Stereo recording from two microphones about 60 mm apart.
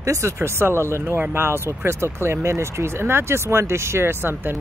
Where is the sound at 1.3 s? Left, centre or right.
Right.